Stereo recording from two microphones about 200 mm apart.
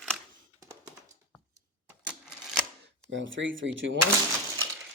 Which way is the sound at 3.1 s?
70° right (ahead or behind).